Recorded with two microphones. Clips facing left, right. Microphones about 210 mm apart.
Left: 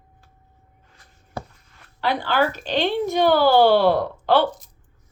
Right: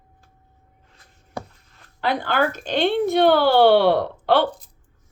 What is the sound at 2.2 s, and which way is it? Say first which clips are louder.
Speech: even; 50° right (ahead or behind).